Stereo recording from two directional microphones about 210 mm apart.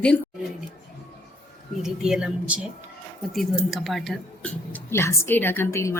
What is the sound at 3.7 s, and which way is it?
A woman's voice, centre (ahead or behind).